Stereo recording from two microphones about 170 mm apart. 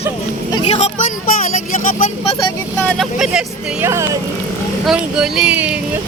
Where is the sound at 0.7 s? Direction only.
45° left (ahead or behind).